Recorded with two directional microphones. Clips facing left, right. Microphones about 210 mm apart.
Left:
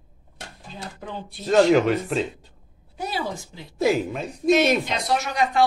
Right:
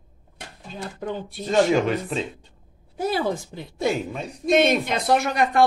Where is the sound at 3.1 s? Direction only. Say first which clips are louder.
Right 6 dB; 55° right (ahead or behind).